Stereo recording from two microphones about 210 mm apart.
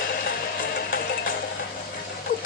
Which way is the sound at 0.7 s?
45° left (ahead or behind).